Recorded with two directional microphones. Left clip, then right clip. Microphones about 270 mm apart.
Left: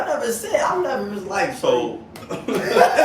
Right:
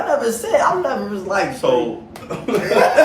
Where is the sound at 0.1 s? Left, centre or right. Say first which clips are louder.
Right 8 dB; centre.